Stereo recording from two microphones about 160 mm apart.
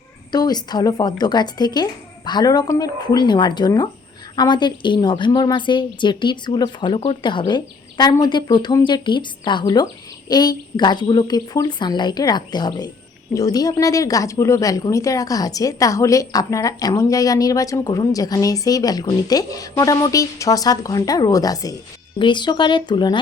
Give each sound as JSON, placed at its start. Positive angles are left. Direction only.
{"t": 0.3, "sound": "a woman's voice", "side_deg": 25}